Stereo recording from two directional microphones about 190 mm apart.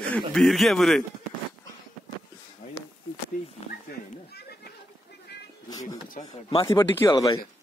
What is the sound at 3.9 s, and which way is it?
Goat, 55° left (ahead or behind).